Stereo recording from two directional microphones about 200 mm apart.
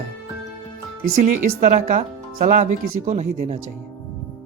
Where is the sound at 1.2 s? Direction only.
35° right (ahead or behind).